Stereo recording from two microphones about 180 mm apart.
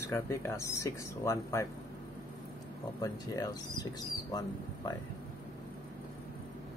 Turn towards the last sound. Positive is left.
turn(degrees=20)  # may be behind; listen again after turning